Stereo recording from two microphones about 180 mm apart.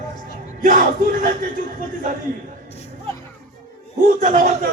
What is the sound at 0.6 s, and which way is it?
Crowd, 50° right (ahead or behind).